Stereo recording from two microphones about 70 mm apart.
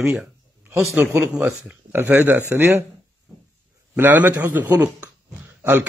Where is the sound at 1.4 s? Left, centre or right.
Right.